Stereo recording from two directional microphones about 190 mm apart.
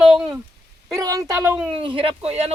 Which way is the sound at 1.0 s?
20° right (ahead or behind).